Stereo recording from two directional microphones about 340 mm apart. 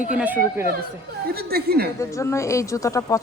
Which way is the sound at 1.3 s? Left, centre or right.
Right.